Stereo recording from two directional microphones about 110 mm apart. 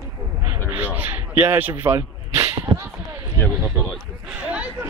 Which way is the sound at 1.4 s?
15° right (ahead or behind).